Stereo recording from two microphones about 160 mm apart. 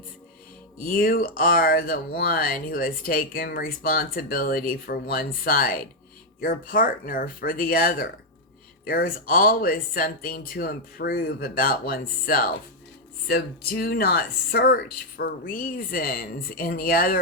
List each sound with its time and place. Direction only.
0.8 s speech: 65° left (ahead or behind)